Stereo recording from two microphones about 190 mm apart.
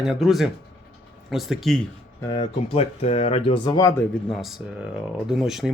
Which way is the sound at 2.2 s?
25° left (ahead or behind).